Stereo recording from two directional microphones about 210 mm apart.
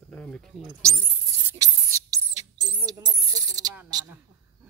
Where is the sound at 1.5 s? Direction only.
15° right (ahead or behind).